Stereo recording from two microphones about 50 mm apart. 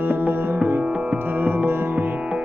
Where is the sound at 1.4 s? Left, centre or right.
Right.